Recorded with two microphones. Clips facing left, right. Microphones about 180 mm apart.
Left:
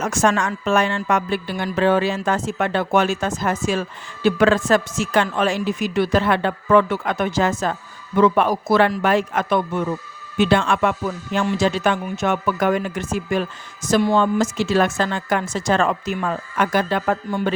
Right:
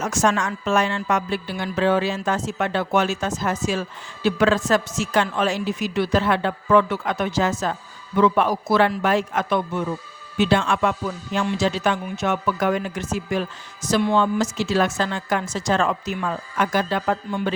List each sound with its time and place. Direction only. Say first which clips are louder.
0.0 s a woman's voice: left 2 dB; 55° left (ahead or behind)